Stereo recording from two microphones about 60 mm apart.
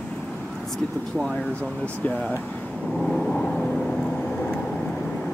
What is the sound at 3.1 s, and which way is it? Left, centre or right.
Vehicle, centre.